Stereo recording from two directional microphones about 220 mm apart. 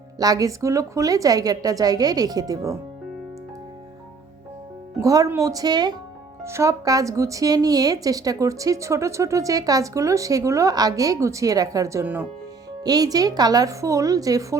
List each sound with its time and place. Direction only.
0.2 s speech: 15° right (ahead or behind)
4.9 s speech: 15° right (ahead or behind)